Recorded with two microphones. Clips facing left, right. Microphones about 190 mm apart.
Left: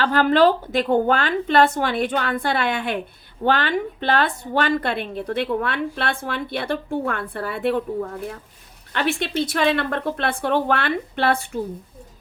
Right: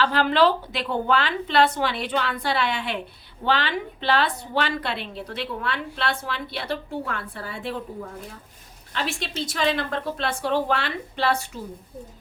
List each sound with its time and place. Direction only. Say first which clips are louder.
0.0 s a woman's voice: left 3 dB; 50° left (ahead or behind)
8.9 s a woman's voice: left 6 dB; 60° left (ahead or behind)